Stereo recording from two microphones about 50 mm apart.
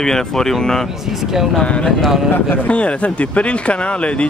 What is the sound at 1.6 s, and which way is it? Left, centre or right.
Speech, left.